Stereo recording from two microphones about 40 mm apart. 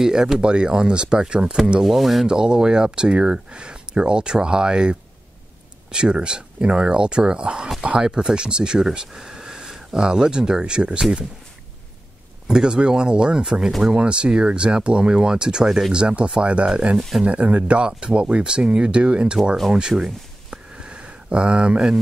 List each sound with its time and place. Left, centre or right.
0.0 s speech: centre
1.9 s speech: centre
2.2 s speech: centre
12.4 s speech: centre
17.2 s speech: right
19.9 s a sound: centre